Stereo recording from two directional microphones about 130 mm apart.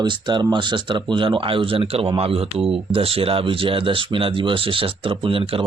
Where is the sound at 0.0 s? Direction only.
35° right (ahead or behind).